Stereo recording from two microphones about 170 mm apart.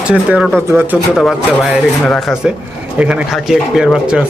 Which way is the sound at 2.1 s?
Centre (ahead or behind).